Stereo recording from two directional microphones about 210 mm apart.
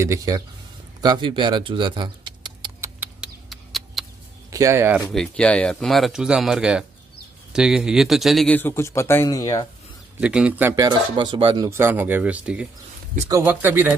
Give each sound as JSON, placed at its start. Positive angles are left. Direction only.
{"t": 0.0, "sound": "speech", "side_deg": -15}
{"t": 3.0, "sound": "a sound", "side_deg": -5}
{"t": 4.5, "sound": "speech", "side_deg": -15}
{"t": 5.1, "sound": "a man's voice", "side_deg": 5}
{"t": 10.2, "sound": "speech", "side_deg": -5}
{"t": 11.1, "sound": "speech", "side_deg": -20}